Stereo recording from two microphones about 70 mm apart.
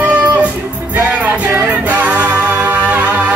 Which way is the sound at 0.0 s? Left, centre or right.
Right.